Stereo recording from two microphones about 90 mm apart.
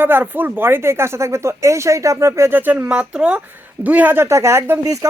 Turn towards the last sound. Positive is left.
turn(degrees=-30)  # may be behind; listen again after turning